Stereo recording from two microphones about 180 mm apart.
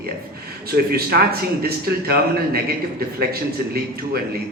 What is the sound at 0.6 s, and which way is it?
A man's voice, 60° right (ahead or behind).